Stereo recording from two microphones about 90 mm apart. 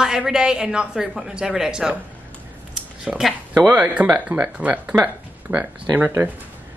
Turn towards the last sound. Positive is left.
turn(degrees=-20)  # may be behind; listen again after turning